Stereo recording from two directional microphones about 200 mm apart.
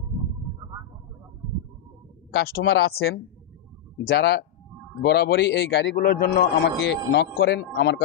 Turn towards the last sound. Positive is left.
turn(degrees=55)  # may be behind; listen again after turning